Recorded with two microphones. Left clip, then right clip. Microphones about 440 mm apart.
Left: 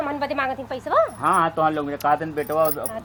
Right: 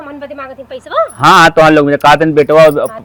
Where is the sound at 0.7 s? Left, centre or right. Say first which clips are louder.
Right 7 dB; right.